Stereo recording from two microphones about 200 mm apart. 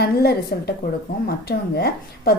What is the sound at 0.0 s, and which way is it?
Speech, 55° left (ahead or behind).